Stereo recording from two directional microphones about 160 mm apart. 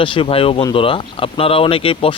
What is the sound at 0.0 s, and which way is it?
Speech, 35° left (ahead or behind).